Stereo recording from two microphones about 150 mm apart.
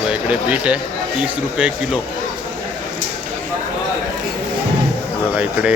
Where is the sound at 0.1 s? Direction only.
10° right (ahead or behind).